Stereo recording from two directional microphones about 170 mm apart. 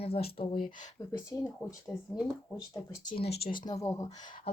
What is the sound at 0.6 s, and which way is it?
Speech, 20° left (ahead or behind).